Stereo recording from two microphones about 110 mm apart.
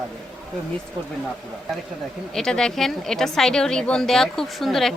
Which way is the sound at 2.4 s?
5° left (ahead or behind).